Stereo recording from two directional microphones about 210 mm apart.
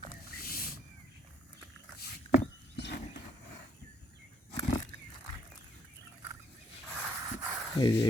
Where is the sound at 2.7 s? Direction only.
55° left (ahead or behind).